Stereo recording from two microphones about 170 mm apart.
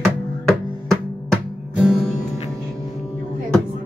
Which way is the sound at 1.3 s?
Centre (ahead or behind).